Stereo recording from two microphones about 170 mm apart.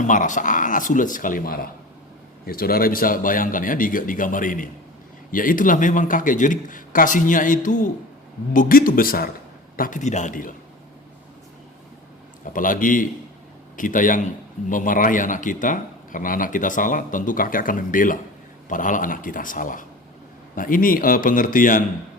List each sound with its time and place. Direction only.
0.0 s speech: 45° left (ahead or behind)
12.5 s speech: 50° left (ahead or behind)